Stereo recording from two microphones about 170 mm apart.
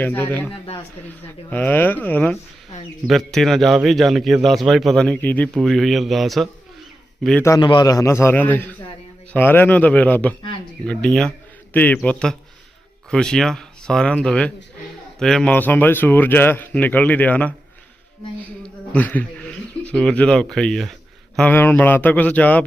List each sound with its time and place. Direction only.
0.0 s a man's voice: 10° left (ahead or behind)
7.4 s a man's voice: 25° left (ahead or behind)